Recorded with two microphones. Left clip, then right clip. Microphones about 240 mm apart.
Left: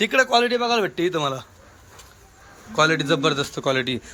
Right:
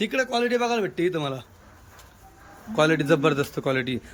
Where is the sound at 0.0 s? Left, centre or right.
Centre.